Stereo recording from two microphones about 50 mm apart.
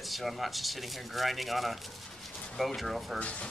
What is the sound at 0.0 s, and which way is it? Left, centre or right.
Speech, centre.